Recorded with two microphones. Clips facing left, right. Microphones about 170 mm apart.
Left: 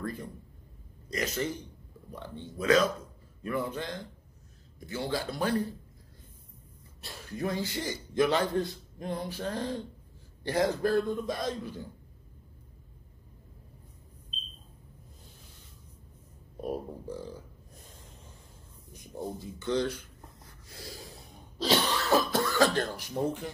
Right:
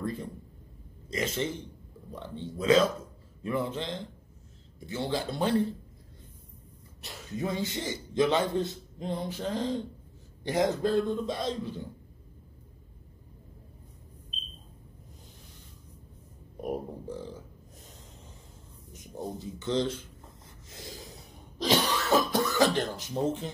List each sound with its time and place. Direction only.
0.0 s a man's voice: 25° right (ahead or behind)
7.0 s a man's voice: 20° right (ahead or behind)
16.6 s speech: 15° right (ahead or behind)
19.6 s writing: 20° right (ahead or behind)